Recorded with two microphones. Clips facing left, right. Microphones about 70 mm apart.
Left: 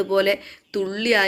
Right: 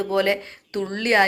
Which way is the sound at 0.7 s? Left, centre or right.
Right.